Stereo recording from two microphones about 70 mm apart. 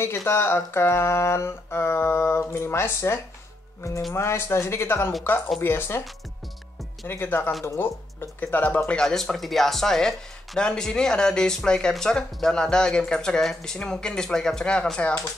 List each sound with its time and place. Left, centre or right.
0.0 s speech: left
7.1 s speech: left
9.0 s speech: centre